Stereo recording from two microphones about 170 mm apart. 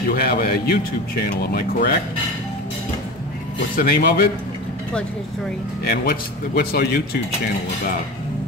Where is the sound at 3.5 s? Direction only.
60° left (ahead or behind).